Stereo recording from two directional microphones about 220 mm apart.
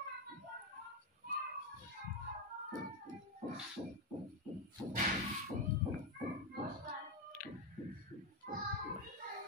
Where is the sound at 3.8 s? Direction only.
20° right (ahead or behind).